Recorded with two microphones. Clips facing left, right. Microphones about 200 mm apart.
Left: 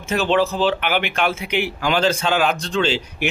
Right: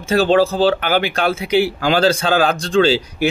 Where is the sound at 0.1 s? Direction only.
35° right (ahead or behind).